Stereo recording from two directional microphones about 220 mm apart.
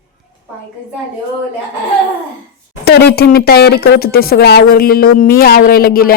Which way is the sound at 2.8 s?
45° left (ahead or behind).